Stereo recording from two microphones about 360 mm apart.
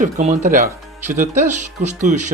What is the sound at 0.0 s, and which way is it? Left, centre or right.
Speech, right.